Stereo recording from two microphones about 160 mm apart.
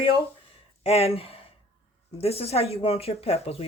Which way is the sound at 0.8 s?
40° left (ahead or behind).